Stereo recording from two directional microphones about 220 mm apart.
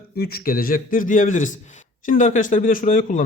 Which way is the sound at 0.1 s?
45° left (ahead or behind).